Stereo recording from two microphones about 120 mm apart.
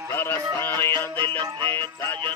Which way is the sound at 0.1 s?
20° left (ahead or behind).